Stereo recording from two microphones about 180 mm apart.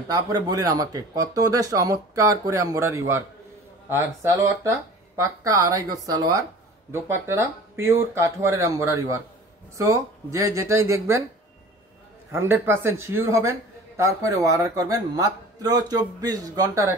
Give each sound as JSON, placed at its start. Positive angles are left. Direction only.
{"t": 0.1, "sound": "a man's voice", "side_deg": -20}
{"t": 12.3, "sound": "a man's voice", "side_deg": -15}